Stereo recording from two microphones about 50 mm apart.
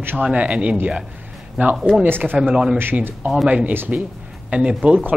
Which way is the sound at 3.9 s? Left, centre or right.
Right.